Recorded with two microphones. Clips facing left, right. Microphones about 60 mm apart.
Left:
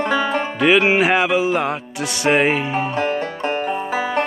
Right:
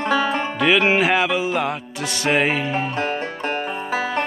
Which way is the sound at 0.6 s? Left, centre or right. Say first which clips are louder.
Left 2 dB; centre.